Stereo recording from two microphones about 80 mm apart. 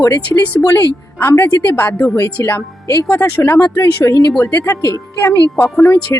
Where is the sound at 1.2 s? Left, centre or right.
Left.